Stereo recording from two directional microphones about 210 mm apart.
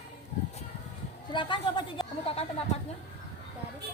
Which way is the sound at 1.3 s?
20° left (ahead or behind).